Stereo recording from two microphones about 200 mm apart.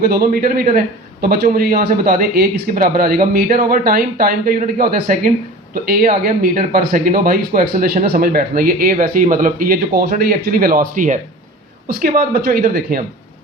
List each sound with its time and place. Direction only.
0.0 s speech: 50° right (ahead or behind)